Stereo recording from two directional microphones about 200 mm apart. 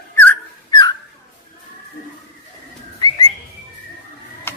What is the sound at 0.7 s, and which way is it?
Dog, 20° left (ahead or behind).